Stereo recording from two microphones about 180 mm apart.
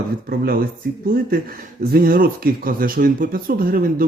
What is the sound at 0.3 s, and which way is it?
Speech, 55° right (ahead or behind).